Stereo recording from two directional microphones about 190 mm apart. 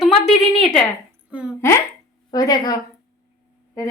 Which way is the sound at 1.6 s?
10° left (ahead or behind).